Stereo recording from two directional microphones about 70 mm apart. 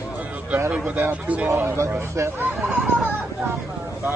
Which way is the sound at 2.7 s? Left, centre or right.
Centre.